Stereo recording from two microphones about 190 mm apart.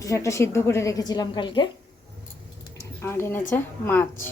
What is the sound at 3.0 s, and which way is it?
A woman's voice, 10° left (ahead or behind).